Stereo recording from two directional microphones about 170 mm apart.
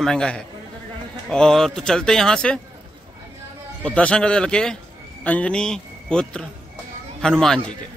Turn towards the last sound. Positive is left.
turn(degrees=5)  # may be behind; listen again after turning